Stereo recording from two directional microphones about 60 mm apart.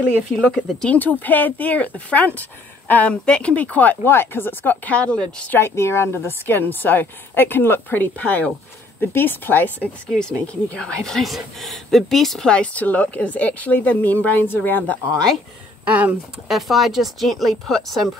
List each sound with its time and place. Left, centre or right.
0.9 s a woman's voice: left
4.9 s a woman's voice: centre
5.5 s a woman's voice: left
9.8 s speech: centre
11.1 s speech: centre
12.5 s a woman's voice: left
15.8 s speech: right
16.4 s speech: centre